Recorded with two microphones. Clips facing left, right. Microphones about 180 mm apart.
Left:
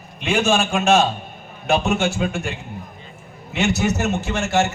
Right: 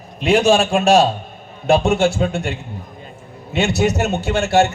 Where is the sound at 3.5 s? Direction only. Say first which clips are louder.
Right 3 dB; 30° right (ahead or behind).